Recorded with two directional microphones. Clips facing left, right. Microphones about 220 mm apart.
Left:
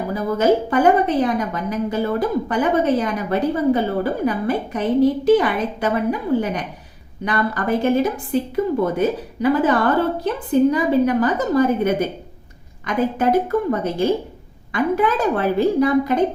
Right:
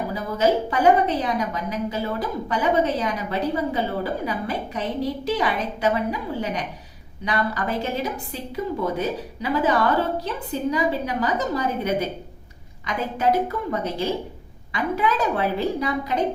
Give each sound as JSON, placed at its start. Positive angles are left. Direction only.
{"t": 0.1, "sound": "a woman's voice", "side_deg": 50}